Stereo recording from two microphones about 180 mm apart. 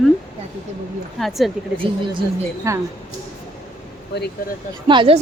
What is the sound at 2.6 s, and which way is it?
Speech, 15° right (ahead or behind).